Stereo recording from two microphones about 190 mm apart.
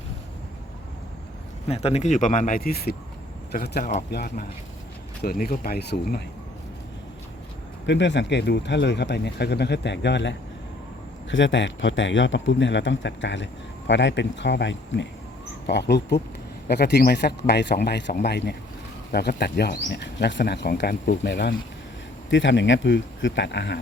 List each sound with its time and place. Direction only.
1.6 s speech: 35° left (ahead or behind); by 6.2 s 55° left (ahead or behind)
7.9 s speech: 70° left (ahead or behind)
22.3 s speech: 75° left (ahead or behind)